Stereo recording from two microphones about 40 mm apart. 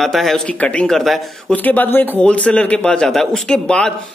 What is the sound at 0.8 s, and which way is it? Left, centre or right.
Speech, centre.